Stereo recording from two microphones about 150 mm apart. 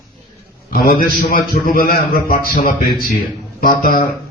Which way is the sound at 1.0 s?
75° left (ahead or behind).